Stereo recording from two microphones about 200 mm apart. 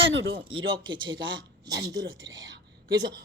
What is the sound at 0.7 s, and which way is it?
Speech, 25° right (ahead or behind).